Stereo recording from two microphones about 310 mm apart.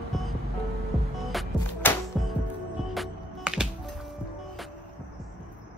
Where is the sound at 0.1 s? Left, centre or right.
Centre.